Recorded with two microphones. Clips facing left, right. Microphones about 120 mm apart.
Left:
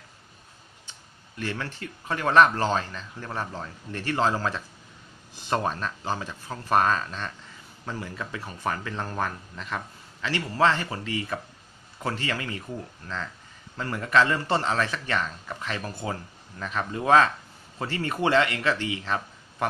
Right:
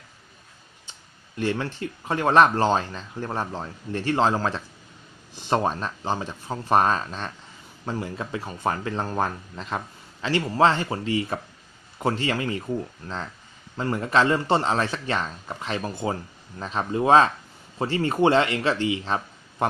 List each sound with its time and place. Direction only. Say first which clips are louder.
1.4 s speech: right 6 dB; 25° right (ahead or behind)